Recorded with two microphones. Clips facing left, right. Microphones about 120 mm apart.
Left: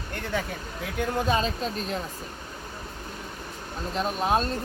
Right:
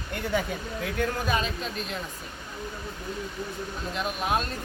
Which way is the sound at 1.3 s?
35° left (ahead or behind).